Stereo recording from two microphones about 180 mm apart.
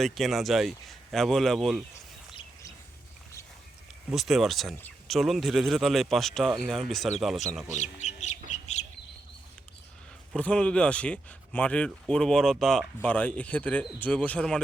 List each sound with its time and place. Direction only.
0.0 s speech: centre (ahead or behind)
4.1 s speech: centre (ahead or behind)
7.7 s chicken: 40° left (ahead or behind)
10.3 s speech: 5° left (ahead or behind)